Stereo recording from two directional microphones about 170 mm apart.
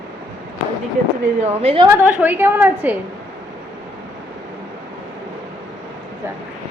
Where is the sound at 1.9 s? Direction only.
10° right (ahead or behind).